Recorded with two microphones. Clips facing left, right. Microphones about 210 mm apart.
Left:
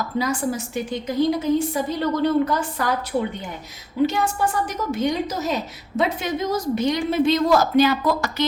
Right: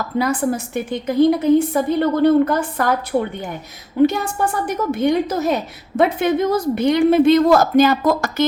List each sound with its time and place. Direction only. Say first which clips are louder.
0.2 s a woman's voice: right 5 dB; 55° right (ahead or behind)